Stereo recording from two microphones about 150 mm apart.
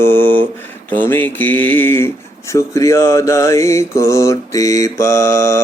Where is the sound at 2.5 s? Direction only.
20° left (ahead or behind).